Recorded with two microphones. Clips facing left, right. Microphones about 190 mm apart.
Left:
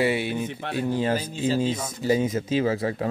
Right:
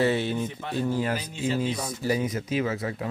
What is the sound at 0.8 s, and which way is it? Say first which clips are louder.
Speech: left 4 dB; 25° left (ahead or behind).